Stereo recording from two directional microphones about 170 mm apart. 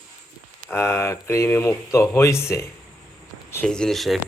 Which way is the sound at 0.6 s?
15° left (ahead or behind).